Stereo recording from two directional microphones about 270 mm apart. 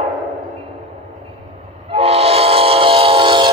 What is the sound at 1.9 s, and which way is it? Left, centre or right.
Train, right.